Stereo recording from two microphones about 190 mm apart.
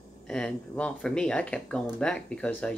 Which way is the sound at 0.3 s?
5° left (ahead or behind).